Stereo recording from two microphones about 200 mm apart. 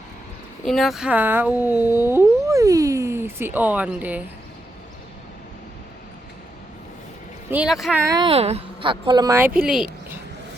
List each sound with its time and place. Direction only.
0.6 s speech: centre (ahead or behind)
7.5 s speech: 5° right (ahead or behind)
8.0 s speech: 20° right (ahead or behind)
8.3 s speech: 30° right (ahead or behind); by 9.9 s centre (ahead or behind)